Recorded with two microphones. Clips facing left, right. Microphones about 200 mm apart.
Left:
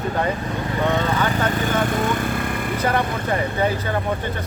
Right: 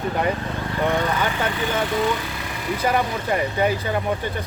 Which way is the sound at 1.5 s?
50° left (ahead or behind).